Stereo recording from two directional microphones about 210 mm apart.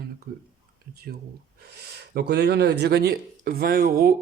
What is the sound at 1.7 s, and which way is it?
Speech, 50° right (ahead or behind).